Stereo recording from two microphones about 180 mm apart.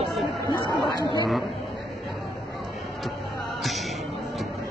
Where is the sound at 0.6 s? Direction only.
25° left (ahead or behind).